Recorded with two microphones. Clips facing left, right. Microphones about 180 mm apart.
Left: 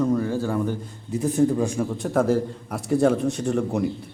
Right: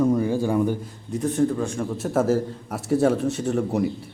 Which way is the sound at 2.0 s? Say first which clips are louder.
Even; 5° right (ahead or behind).